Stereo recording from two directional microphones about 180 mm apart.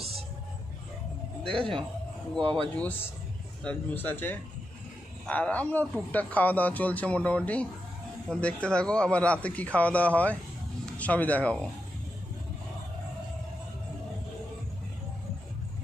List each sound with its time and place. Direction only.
1.4 s a man's voice: 30° right (ahead or behind)
2.8 s a man's voice: 10° left (ahead or behind)